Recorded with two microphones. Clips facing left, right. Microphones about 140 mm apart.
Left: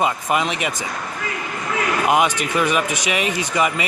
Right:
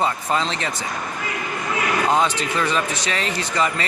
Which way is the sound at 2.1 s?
15° left (ahead or behind).